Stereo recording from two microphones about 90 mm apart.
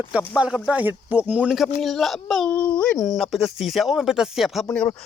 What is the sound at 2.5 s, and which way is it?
Speech, 15° left (ahead or behind).